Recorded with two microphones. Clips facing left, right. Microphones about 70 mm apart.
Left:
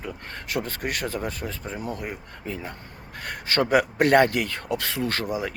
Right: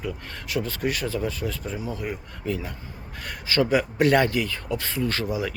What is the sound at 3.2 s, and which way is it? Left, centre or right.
Speech, left.